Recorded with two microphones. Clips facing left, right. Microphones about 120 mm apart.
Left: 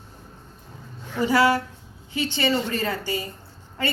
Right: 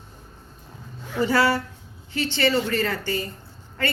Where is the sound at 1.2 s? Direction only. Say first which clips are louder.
Left 1 dB; 15° left (ahead or behind).